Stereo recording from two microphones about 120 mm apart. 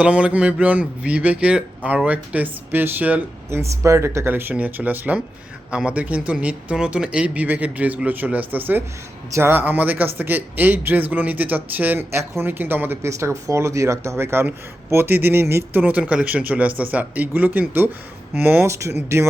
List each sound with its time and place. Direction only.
0.0 s a man's voice: 10° right (ahead or behind)